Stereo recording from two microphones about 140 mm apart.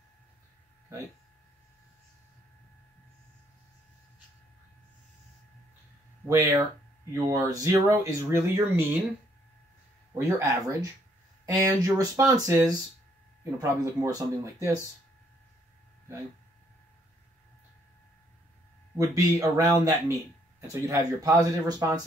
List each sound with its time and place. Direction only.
6.2 s speech: 20° right (ahead or behind)
10.1 s speech: 20° right (ahead or behind)
18.9 s speech: 25° right (ahead or behind)